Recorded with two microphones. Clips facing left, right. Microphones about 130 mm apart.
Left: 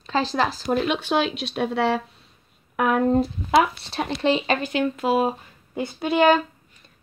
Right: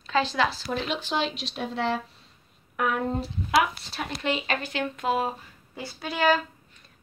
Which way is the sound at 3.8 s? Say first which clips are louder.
Left 8 dB; 65° left (ahead or behind).